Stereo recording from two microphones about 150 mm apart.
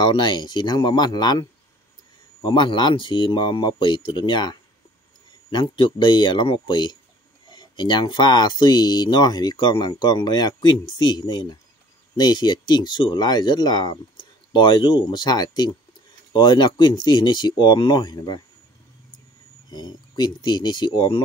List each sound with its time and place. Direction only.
0.0 s speech: 30° left (ahead or behind)
2.4 s a man's voice: 30° left (ahead or behind)
19.7 s a man's voice: 30° left (ahead or behind)